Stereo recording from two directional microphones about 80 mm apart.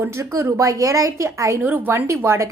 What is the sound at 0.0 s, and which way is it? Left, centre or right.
A woman's voice, right.